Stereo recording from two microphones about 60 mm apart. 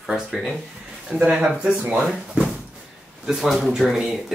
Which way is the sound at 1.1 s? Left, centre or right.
Right.